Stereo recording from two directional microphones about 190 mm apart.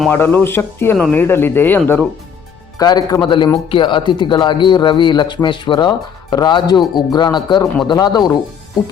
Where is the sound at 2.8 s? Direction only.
20° left (ahead or behind).